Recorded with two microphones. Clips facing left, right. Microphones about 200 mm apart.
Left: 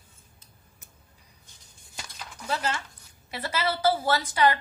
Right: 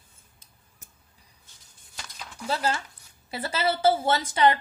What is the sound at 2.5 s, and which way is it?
A woman's voice, 30° right (ahead or behind).